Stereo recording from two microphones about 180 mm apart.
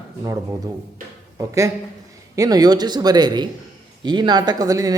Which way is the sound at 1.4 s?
20° right (ahead or behind).